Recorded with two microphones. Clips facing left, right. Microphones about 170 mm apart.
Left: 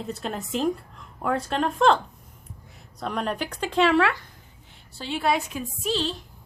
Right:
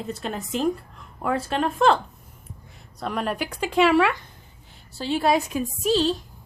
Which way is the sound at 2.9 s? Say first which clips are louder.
Right 1 dB; 5° right (ahead or behind).